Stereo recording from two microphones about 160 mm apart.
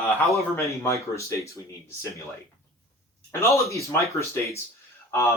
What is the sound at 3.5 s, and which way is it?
Speech, 20° left (ahead or behind).